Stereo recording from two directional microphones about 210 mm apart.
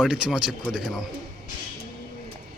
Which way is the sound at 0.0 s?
Centre (ahead or behind).